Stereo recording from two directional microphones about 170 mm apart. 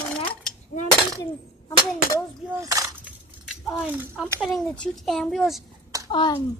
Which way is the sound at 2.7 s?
20° right (ahead or behind).